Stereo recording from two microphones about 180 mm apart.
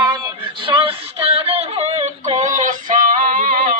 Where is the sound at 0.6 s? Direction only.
30° right (ahead or behind); by 3.8 s 50° right (ahead or behind).